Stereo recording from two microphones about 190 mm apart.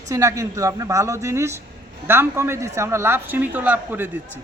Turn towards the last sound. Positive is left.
turn(degrees=-10)  # may be behind; listen again after turning